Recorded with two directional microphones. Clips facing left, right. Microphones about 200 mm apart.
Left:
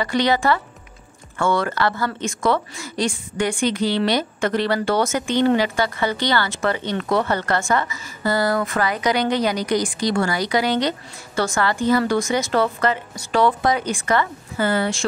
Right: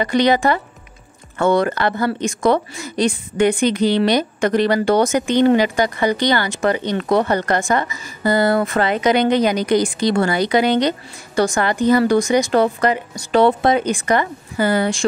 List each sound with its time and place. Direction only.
0.0 s a woman's voice: 20° right (ahead or behind)